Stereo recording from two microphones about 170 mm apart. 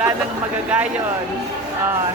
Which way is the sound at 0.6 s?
10° right (ahead or behind).